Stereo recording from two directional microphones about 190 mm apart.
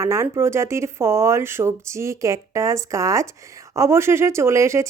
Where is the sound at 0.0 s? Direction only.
15° right (ahead or behind).